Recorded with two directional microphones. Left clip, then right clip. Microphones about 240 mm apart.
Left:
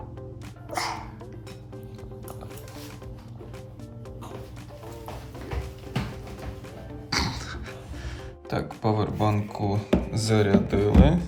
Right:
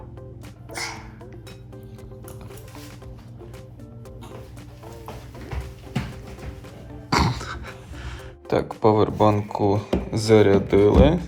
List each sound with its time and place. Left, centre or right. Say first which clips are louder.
0.7 s music: left 2 dB; centre
7.1 s music: right 6 dB; centre